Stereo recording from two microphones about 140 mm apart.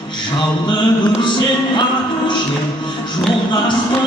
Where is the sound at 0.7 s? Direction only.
35° left (ahead or behind).